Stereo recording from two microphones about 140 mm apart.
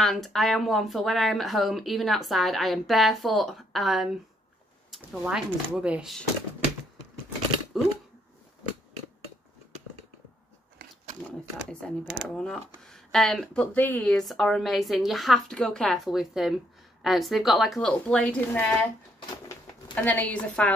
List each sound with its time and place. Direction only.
0.0 s speech: centre (ahead or behind)
7.7 s typing: centre (ahead or behind)
10.8 s a sound: 90° right
12.1 s speech: 5° left (ahead or behind)
19.9 s a woman's voice: 10° left (ahead or behind)